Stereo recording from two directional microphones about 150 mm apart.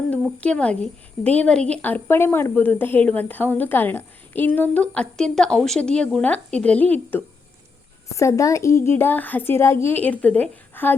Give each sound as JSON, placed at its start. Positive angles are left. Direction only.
{"t": 0.1, "sound": "a woman's voice", "side_deg": 10}